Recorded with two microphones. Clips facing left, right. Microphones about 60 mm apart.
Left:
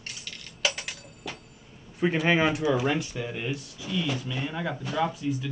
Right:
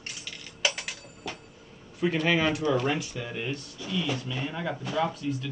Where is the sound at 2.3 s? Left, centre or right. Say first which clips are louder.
Left 3 dB; left.